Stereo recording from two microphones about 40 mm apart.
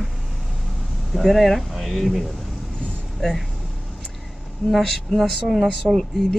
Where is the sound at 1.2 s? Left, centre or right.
Centre.